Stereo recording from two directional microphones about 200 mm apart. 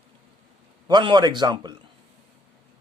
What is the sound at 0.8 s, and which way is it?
Speech, 20° right (ahead or behind).